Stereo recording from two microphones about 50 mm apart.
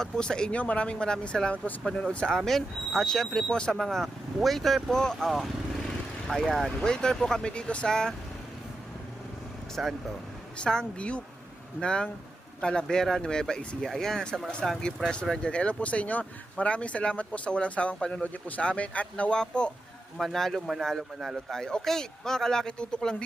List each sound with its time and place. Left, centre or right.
0.0 s speech: centre
6.2 s speech: centre
6.6 s speech: centre
9.8 s speech: centre
10.6 s speech: centre
20.3 s speech: centre